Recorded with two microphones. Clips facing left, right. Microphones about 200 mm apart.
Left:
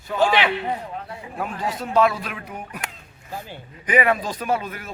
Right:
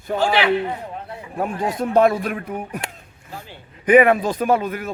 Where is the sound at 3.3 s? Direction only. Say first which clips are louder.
Left 3 dB; 15° left (ahead or behind).